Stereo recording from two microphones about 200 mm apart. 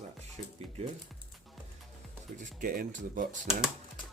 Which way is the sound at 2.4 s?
45° right (ahead or behind).